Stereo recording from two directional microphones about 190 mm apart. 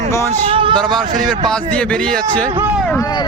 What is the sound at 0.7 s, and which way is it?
Speech, 5° left (ahead or behind).